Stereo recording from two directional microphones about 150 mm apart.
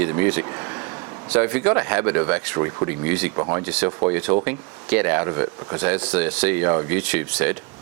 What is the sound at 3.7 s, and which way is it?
Speech, 10° right (ahead or behind).